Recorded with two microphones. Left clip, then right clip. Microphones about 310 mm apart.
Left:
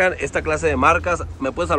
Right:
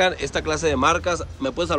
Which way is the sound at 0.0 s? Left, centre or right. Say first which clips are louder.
Left 2 dB; centre.